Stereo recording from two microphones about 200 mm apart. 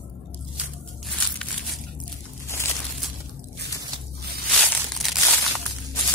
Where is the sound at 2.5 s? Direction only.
15° left (ahead or behind).